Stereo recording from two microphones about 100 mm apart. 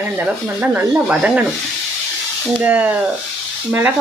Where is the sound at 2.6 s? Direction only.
15° right (ahead or behind).